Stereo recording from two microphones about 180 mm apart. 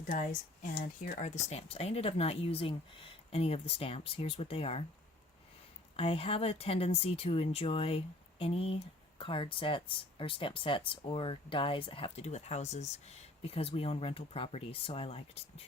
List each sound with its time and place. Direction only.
0.0 s speech: 45° left (ahead or behind)
6.0 s speech: 30° left (ahead or behind)